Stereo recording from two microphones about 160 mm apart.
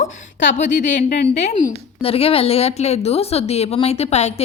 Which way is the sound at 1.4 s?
50° left (ahead or behind).